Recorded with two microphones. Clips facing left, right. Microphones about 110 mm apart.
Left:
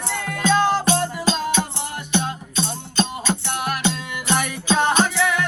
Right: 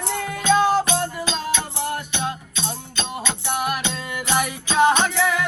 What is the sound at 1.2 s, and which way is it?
Music, 40° left (ahead or behind).